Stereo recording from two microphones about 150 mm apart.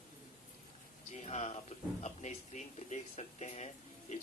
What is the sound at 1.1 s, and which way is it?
Speech, 50° left (ahead or behind).